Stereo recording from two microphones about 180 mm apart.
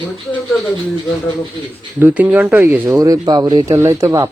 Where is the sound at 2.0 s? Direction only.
10° right (ahead or behind).